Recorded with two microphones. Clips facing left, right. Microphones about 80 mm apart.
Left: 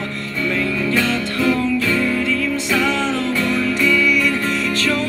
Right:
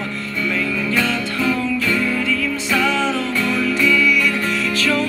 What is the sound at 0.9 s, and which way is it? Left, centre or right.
Music, left.